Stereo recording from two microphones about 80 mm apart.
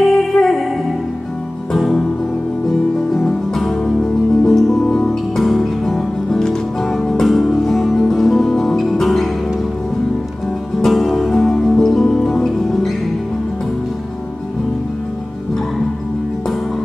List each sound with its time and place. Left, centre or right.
0.0 s music: centre
3.2 s music: centre
10.8 s music: centre